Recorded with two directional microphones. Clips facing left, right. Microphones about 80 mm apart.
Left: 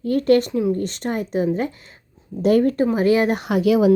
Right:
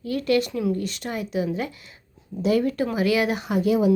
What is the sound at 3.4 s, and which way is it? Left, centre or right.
Speech, left.